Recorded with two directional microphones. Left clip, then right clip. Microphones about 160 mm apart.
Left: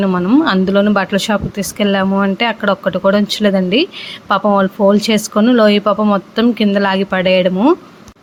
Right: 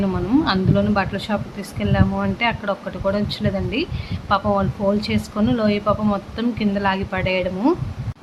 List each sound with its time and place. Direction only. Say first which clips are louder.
0.0 s speech: left 7 dB; 40° left (ahead or behind)